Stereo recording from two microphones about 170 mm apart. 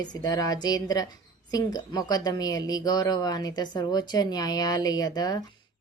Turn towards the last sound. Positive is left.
turn(degrees=25)  # may be behind; listen again after turning